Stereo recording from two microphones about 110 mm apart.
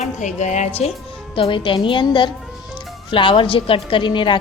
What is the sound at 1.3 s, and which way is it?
A woman's voice, 50° left (ahead or behind).